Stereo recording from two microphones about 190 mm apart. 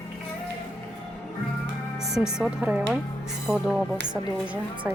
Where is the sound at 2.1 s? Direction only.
5° right (ahead or behind).